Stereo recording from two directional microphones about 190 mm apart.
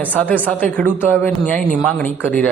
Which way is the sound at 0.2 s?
10° left (ahead or behind).